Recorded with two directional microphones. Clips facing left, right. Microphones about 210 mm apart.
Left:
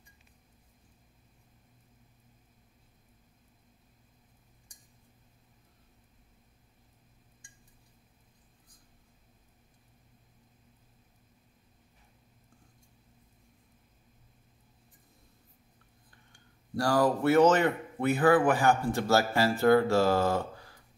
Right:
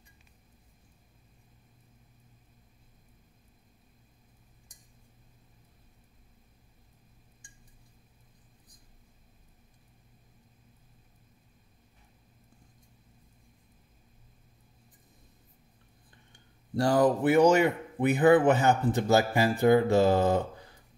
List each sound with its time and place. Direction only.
16.3 s speech: 20° right (ahead or behind)